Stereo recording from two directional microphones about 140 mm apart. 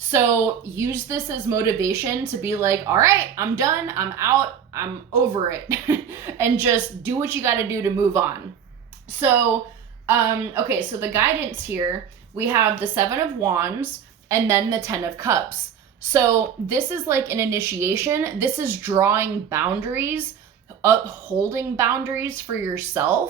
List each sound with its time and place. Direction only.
0.1 s speech: 15° right (ahead or behind)
10.1 s a woman's voice: 15° right (ahead or behind)